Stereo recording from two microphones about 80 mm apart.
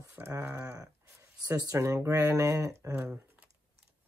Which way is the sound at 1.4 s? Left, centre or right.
Right.